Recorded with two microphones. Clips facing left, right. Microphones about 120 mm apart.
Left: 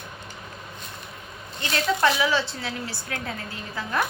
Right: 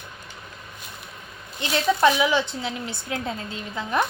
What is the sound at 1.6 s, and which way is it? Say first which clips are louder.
Speech: right 3 dB; 15° right (ahead or behind).